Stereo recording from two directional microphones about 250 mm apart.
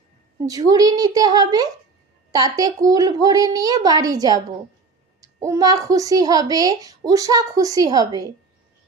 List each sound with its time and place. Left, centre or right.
0.4 s a woman's voice: centre